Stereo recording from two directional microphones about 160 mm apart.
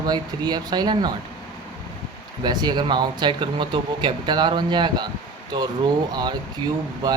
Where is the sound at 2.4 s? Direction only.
25° right (ahead or behind).